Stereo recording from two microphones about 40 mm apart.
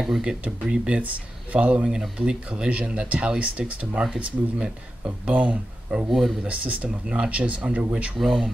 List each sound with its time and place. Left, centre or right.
0.2 s speech: right
1.9 s speech: centre
8.2 s speech: centre